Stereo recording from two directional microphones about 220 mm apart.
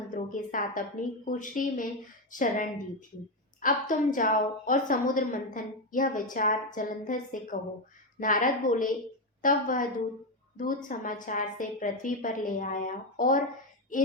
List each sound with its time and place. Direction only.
0.1 s a woman's voice: 35° left (ahead or behind)
10.8 s a woman's voice: 35° left (ahead or behind)